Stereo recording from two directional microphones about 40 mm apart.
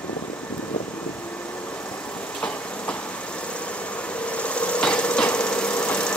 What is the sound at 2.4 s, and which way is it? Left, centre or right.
Vehicle, left.